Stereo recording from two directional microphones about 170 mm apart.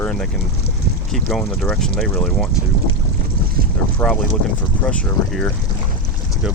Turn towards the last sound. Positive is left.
turn(degrees=5)  # may be behind; listen again after turning